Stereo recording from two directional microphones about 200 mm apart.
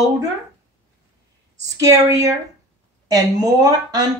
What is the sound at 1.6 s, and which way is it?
A woman's voice, 15° right (ahead or behind).